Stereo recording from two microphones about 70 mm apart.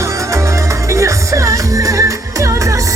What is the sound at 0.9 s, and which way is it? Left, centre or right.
Music, right.